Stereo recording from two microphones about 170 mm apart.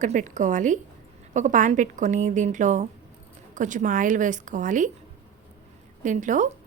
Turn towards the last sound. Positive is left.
turn(degrees=-45)  # may be behind; listen again after turning